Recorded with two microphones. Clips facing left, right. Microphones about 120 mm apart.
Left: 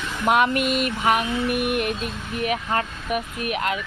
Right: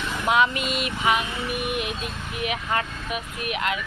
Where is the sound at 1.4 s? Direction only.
5° left (ahead or behind).